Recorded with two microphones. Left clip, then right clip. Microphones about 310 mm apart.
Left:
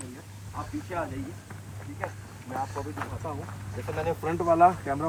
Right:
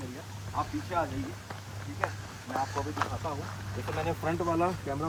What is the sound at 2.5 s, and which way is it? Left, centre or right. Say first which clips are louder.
Speech: right 2 dB; centre.